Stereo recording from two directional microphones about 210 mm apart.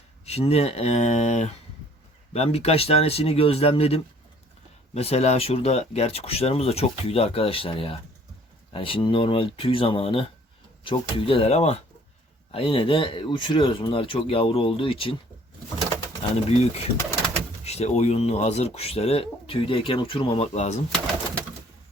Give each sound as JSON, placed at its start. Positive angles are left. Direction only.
{"t": 0.3, "sound": "speech", "side_deg": 30}